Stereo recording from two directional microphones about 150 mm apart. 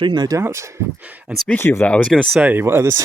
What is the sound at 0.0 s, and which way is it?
Speech, 30° right (ahead or behind).